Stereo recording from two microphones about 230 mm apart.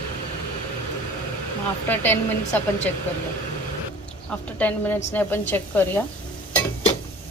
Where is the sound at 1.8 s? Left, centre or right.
Centre.